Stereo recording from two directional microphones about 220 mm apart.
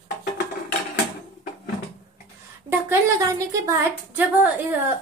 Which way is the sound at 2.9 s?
15° right (ahead or behind).